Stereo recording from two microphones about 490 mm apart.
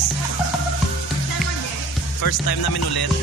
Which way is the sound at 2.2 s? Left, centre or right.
Left.